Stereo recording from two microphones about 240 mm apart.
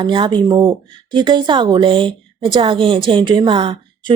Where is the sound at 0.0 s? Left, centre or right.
Centre.